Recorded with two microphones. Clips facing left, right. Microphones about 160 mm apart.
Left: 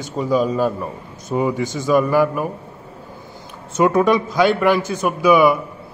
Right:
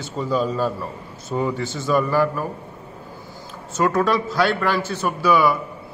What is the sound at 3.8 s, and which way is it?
A man's voice, 15° left (ahead or behind).